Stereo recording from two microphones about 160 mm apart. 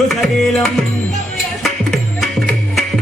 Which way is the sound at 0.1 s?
Centre (ahead or behind).